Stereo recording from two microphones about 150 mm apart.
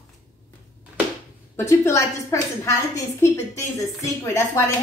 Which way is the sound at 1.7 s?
20° left (ahead or behind).